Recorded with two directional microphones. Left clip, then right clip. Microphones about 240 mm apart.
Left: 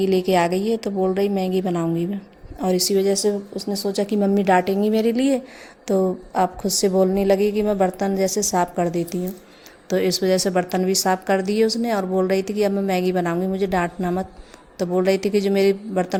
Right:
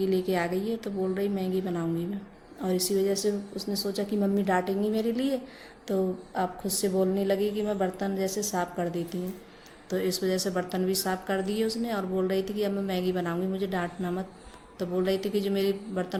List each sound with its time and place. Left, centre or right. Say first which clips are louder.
0.0 s a woman's voice: left 9 dB; left